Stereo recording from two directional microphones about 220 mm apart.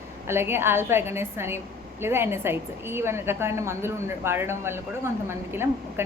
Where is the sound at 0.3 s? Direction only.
10° right (ahead or behind).